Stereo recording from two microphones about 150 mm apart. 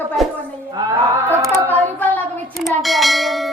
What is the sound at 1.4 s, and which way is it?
Female singing, 20° right (ahead or behind).